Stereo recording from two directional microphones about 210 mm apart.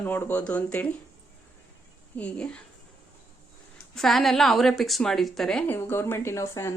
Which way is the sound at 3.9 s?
Centre (ahead or behind).